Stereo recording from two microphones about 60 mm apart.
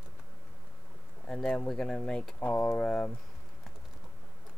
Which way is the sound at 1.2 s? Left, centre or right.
Centre.